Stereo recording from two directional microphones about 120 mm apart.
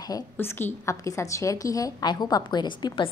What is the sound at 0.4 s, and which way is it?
A woman's voice, 20° left (ahead or behind).